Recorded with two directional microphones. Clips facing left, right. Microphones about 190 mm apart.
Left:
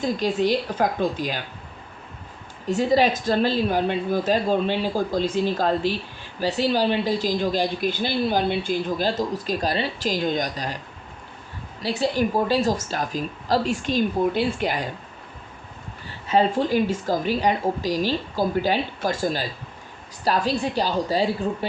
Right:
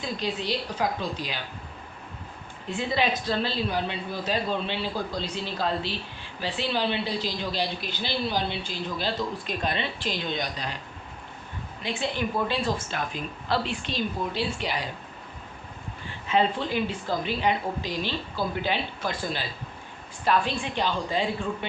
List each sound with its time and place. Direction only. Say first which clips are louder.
0.0 s speech: left 8 dB; 45° left (ahead or behind)
2.6 s speech: left 7 dB; 40° left (ahead or behind)
11.8 s speech: left 7 dB; 35° left (ahead or behind)
16.0 s speech: left 4 dB; 40° left (ahead or behind)